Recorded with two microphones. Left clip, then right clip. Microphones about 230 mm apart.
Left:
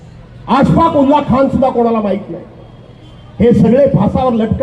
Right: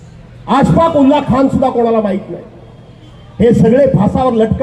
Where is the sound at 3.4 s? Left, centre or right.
Right.